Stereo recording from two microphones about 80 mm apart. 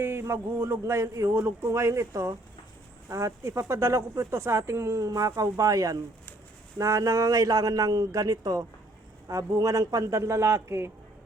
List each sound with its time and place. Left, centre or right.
0.0 s a man's voice: right